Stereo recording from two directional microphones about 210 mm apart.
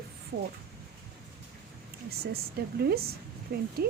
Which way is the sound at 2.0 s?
50° right (ahead or behind).